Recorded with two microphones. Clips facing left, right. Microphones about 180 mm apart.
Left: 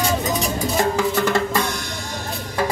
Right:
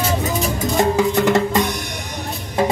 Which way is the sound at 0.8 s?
20° right (ahead or behind).